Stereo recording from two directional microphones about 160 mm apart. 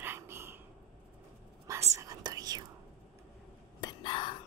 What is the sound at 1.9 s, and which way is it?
Whispering, 20° right (ahead or behind).